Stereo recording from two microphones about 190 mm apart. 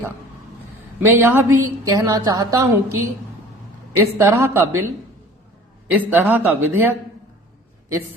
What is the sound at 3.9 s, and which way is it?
Speech, 15° right (ahead or behind).